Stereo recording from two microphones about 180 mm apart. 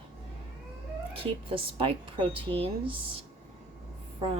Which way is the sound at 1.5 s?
30° right (ahead or behind).